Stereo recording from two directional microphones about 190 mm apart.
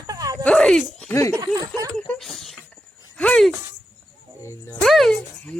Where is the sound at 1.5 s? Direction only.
20° right (ahead or behind).